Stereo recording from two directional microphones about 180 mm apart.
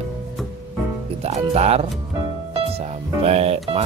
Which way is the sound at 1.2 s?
35° right (ahead or behind).